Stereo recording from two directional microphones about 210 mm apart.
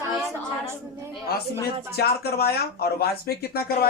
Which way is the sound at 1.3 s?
50° left (ahead or behind).